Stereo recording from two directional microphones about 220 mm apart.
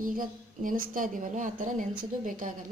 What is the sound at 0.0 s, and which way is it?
A woman's voice, 40° right (ahead or behind).